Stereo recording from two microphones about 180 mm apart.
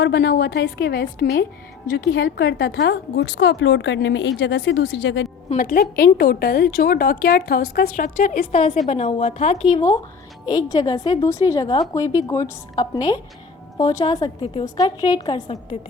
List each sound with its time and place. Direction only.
0.0 s a woman's voice: 65° left (ahead or behind); by 5.3 s 80° left
5.5 s a woman's voice: 55° left (ahead or behind)
8.9 s a woman's voice: 35° left (ahead or behind)
9.6 s a woman's voice: 25° left (ahead or behind)